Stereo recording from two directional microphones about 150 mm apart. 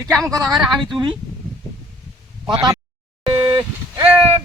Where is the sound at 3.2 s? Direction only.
35° right (ahead or behind).